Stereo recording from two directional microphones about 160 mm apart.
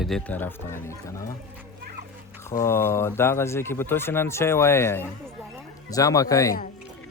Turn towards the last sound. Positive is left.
turn(degrees=20)  # may be behind; listen again after turning